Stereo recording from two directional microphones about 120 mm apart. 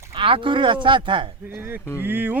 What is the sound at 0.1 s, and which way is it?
Speech, 45° right (ahead or behind).